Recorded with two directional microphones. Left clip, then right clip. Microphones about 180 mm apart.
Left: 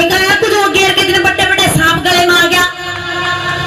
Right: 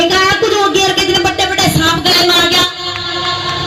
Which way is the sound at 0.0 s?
25° left (ahead or behind).